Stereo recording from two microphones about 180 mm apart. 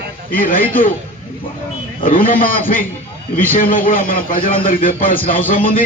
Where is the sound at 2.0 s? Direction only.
50° left (ahead or behind).